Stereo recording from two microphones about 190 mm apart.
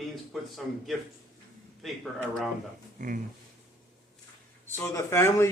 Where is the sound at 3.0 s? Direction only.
45° right (ahead or behind).